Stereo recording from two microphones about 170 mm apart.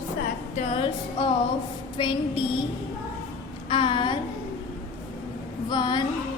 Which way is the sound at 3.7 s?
30° left (ahead or behind).